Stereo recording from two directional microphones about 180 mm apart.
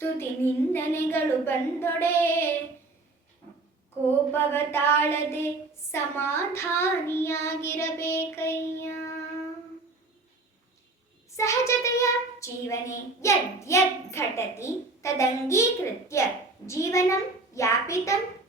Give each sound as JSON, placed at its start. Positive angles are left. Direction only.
{"t": 0.0, "sound": "child singing", "side_deg": 10}
{"t": 4.3, "sound": "child singing", "side_deg": 10}
{"t": 11.3, "sound": "child singing", "side_deg": 15}